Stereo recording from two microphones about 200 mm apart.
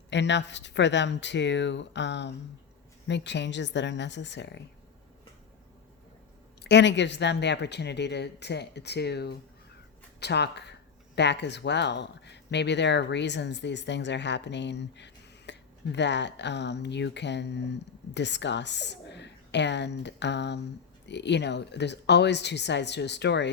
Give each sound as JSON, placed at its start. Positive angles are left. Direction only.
{"t": 0.1, "sound": "speech", "side_deg": 60}
{"t": 6.6, "sound": "speech", "side_deg": 60}